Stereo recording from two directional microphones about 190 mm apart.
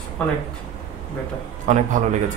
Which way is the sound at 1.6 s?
40° right (ahead or behind).